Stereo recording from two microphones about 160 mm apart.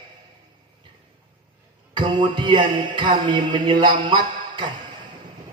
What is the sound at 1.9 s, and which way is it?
A man's voice, 30° right (ahead or behind).